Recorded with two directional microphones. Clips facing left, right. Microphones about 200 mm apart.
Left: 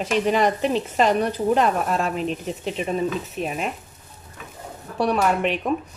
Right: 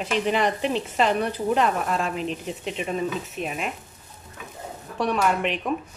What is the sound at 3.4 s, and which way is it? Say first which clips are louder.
Speech: left 3 dB; 40° left (ahead or behind).